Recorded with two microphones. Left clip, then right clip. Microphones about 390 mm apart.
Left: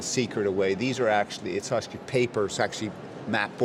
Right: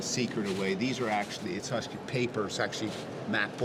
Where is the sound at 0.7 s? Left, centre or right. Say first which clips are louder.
Left 6 dB; left.